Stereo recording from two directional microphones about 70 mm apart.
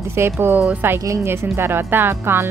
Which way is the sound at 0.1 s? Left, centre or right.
Right.